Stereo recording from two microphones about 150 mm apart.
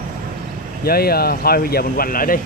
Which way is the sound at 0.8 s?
90° left.